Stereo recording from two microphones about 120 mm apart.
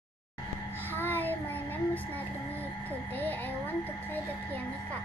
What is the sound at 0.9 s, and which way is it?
Child singing, 15° left (ahead or behind).